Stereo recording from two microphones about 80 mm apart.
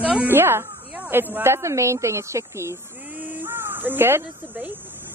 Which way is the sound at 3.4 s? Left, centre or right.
Right.